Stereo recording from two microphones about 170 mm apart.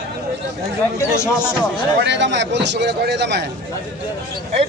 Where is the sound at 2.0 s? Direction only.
90° right.